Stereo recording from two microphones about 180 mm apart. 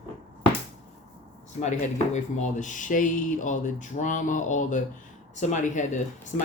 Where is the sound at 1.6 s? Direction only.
40° left (ahead or behind).